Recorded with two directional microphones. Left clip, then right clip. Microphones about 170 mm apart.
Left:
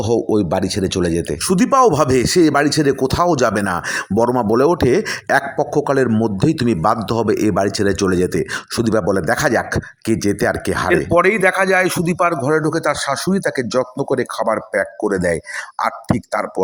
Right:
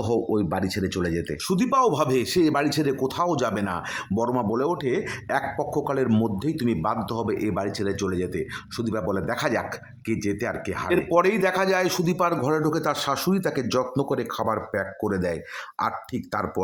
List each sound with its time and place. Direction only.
0.0 s speech: 20° left (ahead or behind)
10.8 s speech: 15° left (ahead or behind)